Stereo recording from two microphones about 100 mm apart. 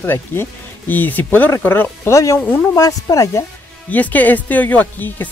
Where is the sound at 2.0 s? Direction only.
30° left (ahead or behind).